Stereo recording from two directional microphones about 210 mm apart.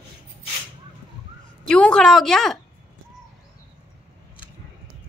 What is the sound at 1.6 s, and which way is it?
A woman's voice, 5° left (ahead or behind).